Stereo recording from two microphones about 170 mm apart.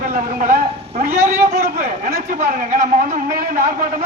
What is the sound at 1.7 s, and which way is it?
A man's voice, 55° right (ahead or behind).